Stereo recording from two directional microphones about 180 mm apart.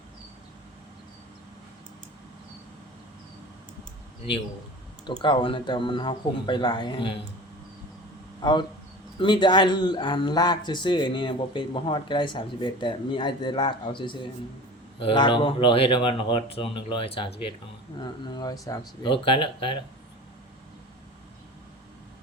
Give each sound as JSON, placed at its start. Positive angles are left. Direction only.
{"t": 5.0, "sound": "a man's voice", "side_deg": 25}
{"t": 8.4, "sound": "a man's voice", "side_deg": 25}